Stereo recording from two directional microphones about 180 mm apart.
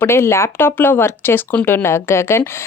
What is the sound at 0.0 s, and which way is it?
Speech, 15° left (ahead or behind).